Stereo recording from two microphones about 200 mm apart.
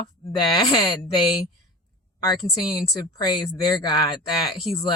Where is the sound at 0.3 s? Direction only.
20° left (ahead or behind).